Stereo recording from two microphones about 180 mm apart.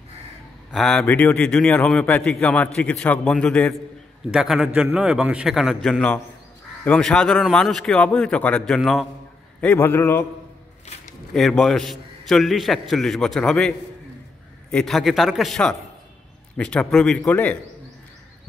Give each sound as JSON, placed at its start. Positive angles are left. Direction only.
{"t": 0.7, "sound": "a man's voice", "side_deg": 0}
{"t": 4.3, "sound": "a man's voice", "side_deg": -5}
{"t": 11.3, "sound": "a man's voice", "side_deg": 0}